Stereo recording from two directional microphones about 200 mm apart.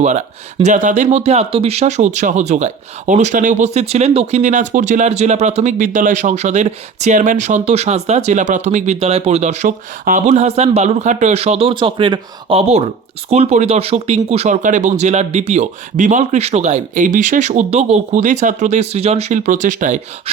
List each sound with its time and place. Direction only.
0.0 s speech: 35° right (ahead or behind)